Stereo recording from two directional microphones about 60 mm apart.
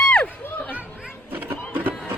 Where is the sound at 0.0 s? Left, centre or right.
Centre.